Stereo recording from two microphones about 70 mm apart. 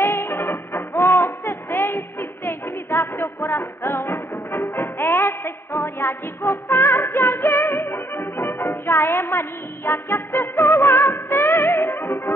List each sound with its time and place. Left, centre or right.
0.0 s music: left